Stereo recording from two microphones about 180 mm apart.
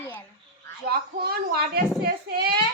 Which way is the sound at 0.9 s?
60° right (ahead or behind).